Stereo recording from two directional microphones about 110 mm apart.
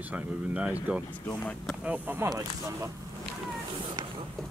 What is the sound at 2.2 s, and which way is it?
Speech, 30° right (ahead or behind).